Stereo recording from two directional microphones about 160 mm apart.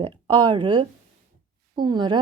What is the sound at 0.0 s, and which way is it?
A woman's voice, 30° right (ahead or behind).